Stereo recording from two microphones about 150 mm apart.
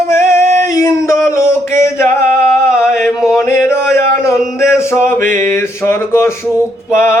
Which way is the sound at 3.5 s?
15° left (ahead or behind).